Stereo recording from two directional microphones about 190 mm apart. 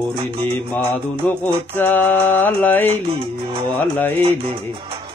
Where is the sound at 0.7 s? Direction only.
10° left (ahead or behind).